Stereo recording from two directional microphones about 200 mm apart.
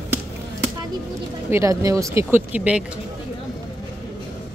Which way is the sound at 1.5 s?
15° right (ahead or behind).